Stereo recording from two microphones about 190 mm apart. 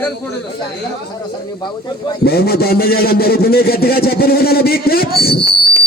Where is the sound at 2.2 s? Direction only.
55° left (ahead or behind).